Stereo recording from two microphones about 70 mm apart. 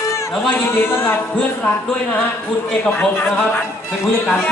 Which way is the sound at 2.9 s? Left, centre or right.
Left.